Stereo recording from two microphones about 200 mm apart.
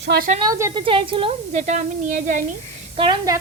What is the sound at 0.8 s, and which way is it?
Speech, 25° right (ahead or behind).